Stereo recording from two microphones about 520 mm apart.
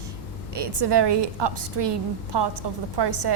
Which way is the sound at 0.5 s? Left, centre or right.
Right.